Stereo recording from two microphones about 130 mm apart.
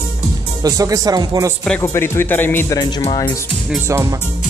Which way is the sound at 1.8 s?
20° left (ahead or behind).